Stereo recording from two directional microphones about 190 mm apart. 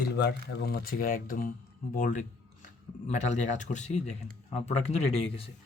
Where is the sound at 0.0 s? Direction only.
60° left (ahead or behind); by 4.9 s 35° left (ahead or behind).